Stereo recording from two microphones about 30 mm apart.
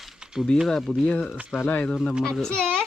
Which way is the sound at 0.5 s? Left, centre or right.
Left.